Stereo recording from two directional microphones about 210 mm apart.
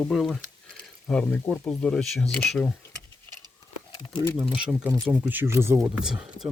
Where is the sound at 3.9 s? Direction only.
15° left (ahead or behind).